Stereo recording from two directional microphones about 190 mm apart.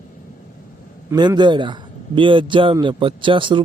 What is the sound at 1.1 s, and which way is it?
Speech, 20° right (ahead or behind).